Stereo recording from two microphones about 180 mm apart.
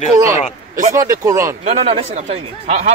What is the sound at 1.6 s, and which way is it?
A man's voice, 35° right (ahead or behind).